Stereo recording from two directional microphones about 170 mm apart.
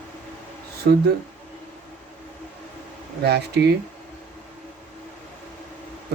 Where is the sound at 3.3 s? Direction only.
75° right (ahead or behind).